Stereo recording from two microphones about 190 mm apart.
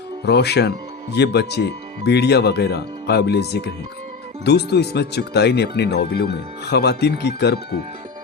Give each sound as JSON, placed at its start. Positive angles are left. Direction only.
{"t": 0.3, "sound": "speech", "side_deg": 60}